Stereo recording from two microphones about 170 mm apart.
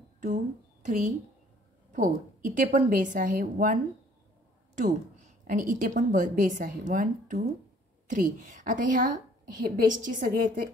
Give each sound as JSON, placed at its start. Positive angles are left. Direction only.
{"t": 0.8, "sound": "a woman's voice", "side_deg": -45}